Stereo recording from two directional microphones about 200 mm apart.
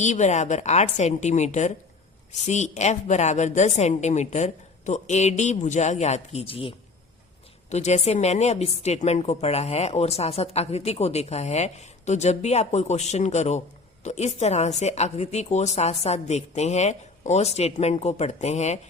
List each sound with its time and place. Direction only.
0.0 s a woman's voice: 35° left (ahead or behind)